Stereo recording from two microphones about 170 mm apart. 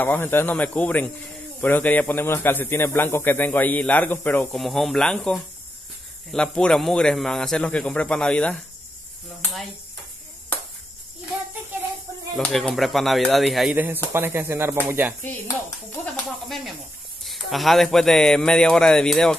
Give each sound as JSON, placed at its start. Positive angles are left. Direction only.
{"t": 0.0, "sound": "a man's voice", "side_deg": 10}
{"t": 12.4, "sound": "a man's voice", "side_deg": 0}
{"t": 13.7, "sound": "speech", "side_deg": -10}
{"t": 16.4, "sound": "a man's voice", "side_deg": 0}